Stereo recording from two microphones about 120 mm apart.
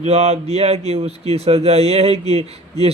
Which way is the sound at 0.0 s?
60° right (ahead or behind).